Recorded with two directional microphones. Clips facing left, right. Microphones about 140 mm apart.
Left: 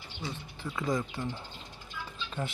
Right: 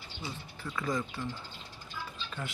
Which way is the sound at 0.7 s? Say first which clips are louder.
Left 2 dB; 20° left (ahead or behind).